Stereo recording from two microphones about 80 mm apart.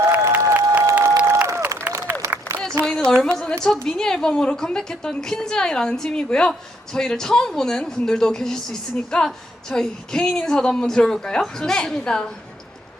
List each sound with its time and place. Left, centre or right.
0.1 s applause: right
2.8 s a sound: centre
3.2 s speech: centre